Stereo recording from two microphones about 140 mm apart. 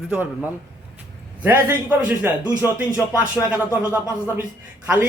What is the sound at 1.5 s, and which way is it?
Speech, 15° right (ahead or behind).